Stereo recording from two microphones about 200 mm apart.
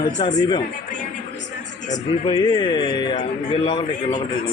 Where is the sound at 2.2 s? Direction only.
20° left (ahead or behind).